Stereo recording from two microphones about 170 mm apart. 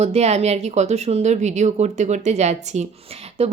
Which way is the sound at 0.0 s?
40° right (ahead or behind).